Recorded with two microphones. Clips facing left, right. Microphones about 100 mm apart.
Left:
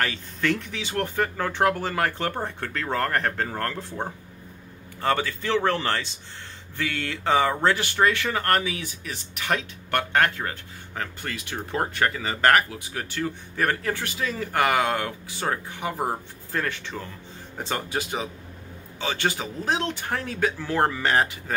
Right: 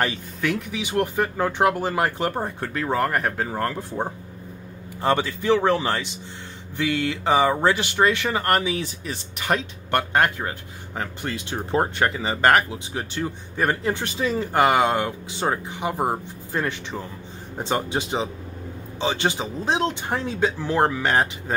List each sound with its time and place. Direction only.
0.0 s speech: 20° right (ahead or behind)
0.5 s speech: 10° right (ahead or behind)
8.7 s speech: 30° right (ahead or behind); by 21.5 s 15° right (ahead or behind)